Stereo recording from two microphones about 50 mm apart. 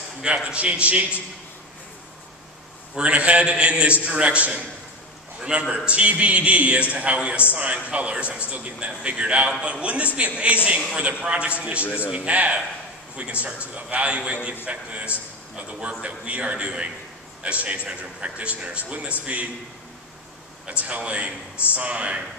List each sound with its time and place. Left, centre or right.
0.2 s a man's voice: right
3.0 s a man's voice: right
11.8 s a man's voice: left
12.1 s a man's voice: right
20.8 s a man's voice: right